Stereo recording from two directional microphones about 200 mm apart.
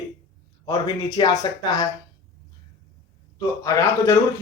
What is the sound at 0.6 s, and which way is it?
Speech, 20° left (ahead or behind).